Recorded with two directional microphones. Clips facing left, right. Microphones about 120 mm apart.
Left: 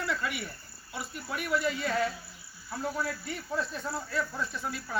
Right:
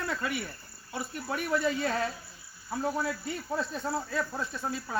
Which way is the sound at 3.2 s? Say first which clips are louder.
Right 1 dB; 35° right (ahead or behind).